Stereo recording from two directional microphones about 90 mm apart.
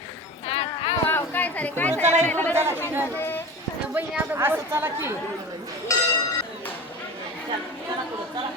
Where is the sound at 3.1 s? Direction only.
25° left (ahead or behind).